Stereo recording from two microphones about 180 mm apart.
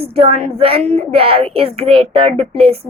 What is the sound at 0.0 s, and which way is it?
Speech, 30° right (ahead or behind).